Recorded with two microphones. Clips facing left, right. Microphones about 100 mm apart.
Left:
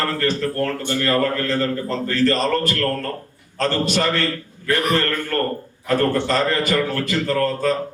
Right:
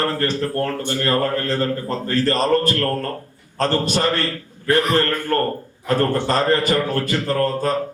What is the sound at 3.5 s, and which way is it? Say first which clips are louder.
A man's voice: right 1 dB; 45° right (ahead or behind).